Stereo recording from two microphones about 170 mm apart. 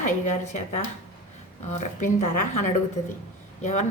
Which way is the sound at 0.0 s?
45° left (ahead or behind).